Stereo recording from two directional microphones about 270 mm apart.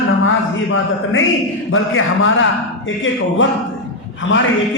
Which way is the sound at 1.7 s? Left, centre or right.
Left.